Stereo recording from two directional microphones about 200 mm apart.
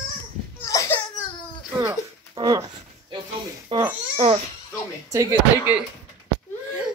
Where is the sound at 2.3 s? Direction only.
20° right (ahead or behind).